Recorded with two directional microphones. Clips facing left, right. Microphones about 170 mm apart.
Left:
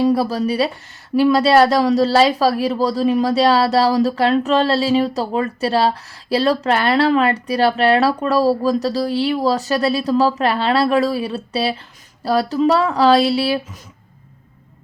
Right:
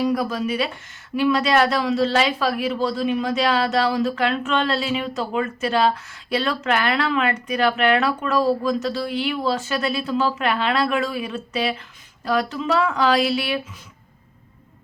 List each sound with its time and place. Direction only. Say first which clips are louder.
0.0 s speech: left 5 dB; 30° left (ahead or behind)